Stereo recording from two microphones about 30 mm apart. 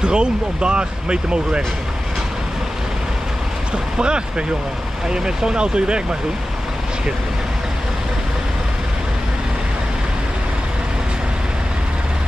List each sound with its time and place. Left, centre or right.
0.0 s speech: right
3.7 s speech: right